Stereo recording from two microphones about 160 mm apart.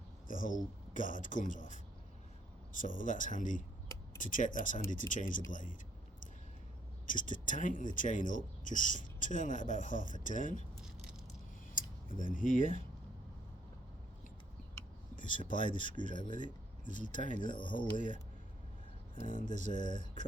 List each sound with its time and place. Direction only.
0.3 s speech: 55° left (ahead or behind)
7.1 s speech: 55° left (ahead or behind)
10.8 s a sound: 5° right (ahead or behind)
11.8 s a sound: 55° left (ahead or behind)
12.1 s speech: 55° left (ahead or behind)
15.1 s speech: 55° left (ahead or behind)
19.2 s speech: 55° left (ahead or behind)